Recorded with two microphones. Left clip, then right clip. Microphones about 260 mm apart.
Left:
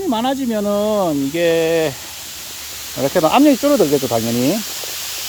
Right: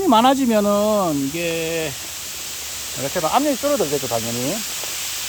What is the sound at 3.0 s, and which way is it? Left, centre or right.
Speech, left.